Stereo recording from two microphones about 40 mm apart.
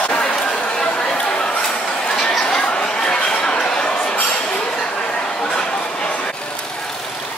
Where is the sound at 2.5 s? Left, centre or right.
Left.